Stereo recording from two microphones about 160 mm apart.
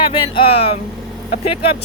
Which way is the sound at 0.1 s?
35° left (ahead or behind).